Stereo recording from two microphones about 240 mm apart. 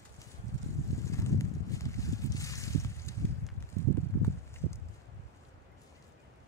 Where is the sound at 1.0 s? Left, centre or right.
Centre.